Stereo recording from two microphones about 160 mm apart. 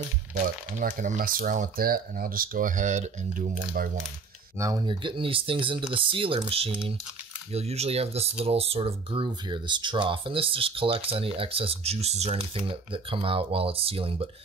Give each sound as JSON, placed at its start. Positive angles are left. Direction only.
{"t": 0.4, "sound": "speech", "side_deg": -60}
{"t": 4.6, "sound": "speech", "side_deg": -20}